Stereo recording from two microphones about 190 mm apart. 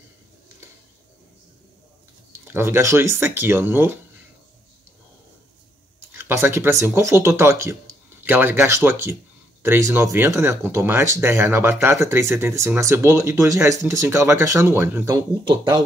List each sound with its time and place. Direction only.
2.4 s speech: 10° right (ahead or behind)
6.1 s speech: 10° right (ahead or behind)
15.4 s speech: 25° right (ahead or behind)